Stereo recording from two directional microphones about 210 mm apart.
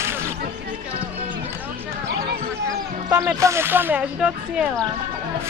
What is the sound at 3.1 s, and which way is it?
Speech, 15° right (ahead or behind).